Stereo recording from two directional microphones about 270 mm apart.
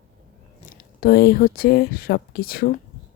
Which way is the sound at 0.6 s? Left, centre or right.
Left.